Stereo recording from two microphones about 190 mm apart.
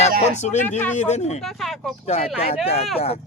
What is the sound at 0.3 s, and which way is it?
Speech, 40° left (ahead or behind).